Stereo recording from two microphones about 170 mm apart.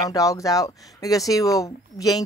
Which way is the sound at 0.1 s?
20° left (ahead or behind).